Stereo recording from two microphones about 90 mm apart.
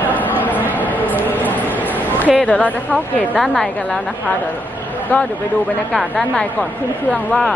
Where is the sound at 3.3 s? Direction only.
5° left (ahead or behind).